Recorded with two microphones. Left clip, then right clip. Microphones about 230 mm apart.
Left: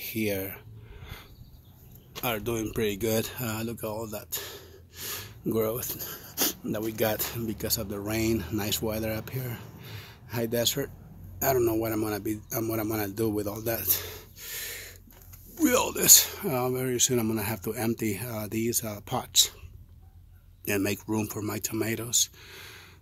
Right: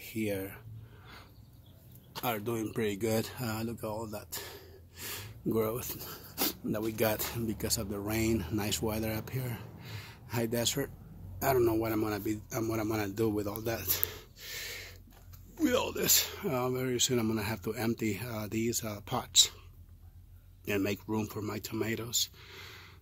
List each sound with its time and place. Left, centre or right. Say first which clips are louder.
0.0 s speech: left 5 dB; centre
2.2 s a man's voice: left 4 dB; centre
15.6 s speech: left 5 dB; left
20.6 s speech: left 4 dB; centre